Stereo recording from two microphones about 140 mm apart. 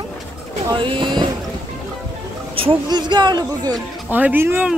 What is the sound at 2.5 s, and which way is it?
Speech, 35° right (ahead or behind).